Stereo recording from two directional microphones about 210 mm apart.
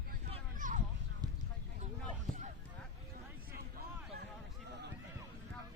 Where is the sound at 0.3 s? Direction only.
35° right (ahead or behind).